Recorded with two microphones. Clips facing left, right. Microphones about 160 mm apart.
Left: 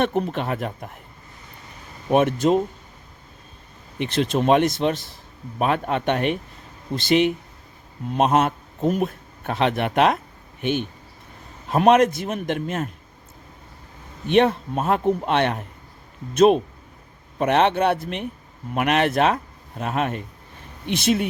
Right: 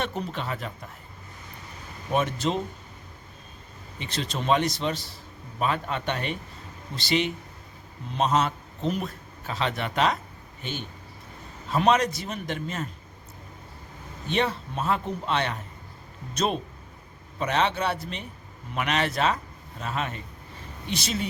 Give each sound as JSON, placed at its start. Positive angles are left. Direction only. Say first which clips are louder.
{"t": 0.0, "sound": "speech", "louder": "left 8 dB", "side_deg": 55}
{"t": 2.0, "sound": "a man's voice", "louder": "left 8 dB", "side_deg": 50}
{"t": 3.9, "sound": "a man's voice", "louder": "left 10 dB", "side_deg": 60}
{"t": 14.3, "sound": "a man's voice", "louder": "left 9 dB", "side_deg": 55}